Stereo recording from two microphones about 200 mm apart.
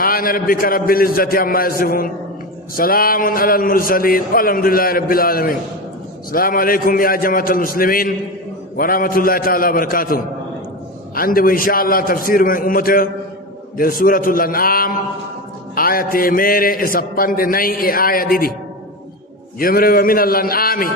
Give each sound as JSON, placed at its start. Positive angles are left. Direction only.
{"t": 0.0, "sound": "a man's voice", "side_deg": 45}
{"t": 19.5, "sound": "a man's voice", "side_deg": 45}